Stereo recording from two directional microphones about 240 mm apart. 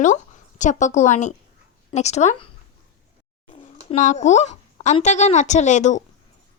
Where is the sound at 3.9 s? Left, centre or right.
Left.